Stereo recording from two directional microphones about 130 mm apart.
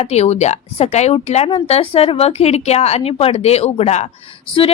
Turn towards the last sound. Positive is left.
turn(degrees=45)  # may be behind; listen again after turning